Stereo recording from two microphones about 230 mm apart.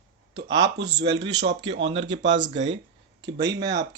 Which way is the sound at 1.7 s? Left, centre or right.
Right.